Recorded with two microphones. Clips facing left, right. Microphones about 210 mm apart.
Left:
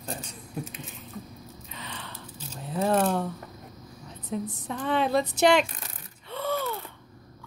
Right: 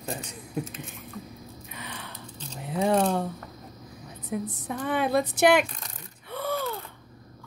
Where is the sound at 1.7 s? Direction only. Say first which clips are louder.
Even; 10° right (ahead or behind).